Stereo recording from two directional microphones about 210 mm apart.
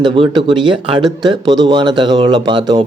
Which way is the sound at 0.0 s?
20° right (ahead or behind).